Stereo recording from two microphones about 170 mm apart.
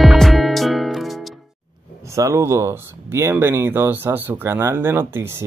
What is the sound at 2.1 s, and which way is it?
Speech, 15° right (ahead or behind).